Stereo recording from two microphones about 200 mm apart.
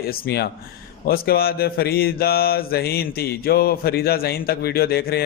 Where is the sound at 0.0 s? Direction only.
50° left (ahead or behind).